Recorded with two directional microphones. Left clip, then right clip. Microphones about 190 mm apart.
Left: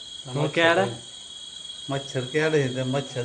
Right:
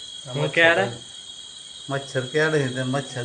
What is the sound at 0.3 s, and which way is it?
Speech, 15° left (ahead or behind).